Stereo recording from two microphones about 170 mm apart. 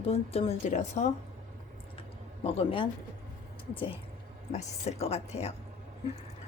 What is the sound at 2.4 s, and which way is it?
Speech, 35° left (ahead or behind).